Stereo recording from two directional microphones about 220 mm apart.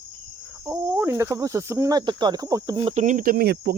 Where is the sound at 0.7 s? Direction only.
10° right (ahead or behind).